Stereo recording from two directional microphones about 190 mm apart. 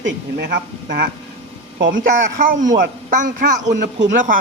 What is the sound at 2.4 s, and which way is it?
A woman's voice, 45° right (ahead or behind).